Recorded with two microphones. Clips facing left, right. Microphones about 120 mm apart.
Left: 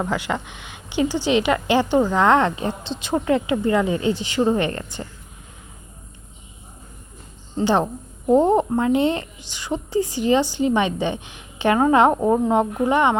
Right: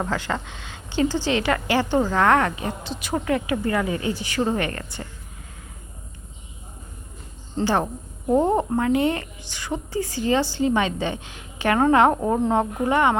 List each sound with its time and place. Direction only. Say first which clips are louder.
0.0 s a woman's voice: left 2 dB; 15° left (ahead or behind)
7.6 s a woman's voice: left 3 dB; 20° left (ahead or behind)